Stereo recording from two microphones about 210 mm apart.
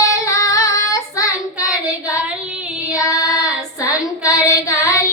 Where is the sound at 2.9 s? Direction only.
15° left (ahead or behind).